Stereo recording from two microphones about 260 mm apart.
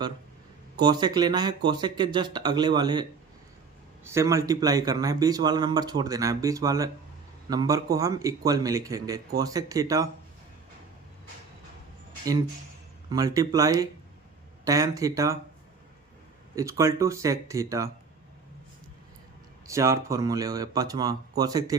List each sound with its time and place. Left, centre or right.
0.8 s speech: centre
12.2 s speech: centre
16.6 s speech: centre
19.6 s speech: centre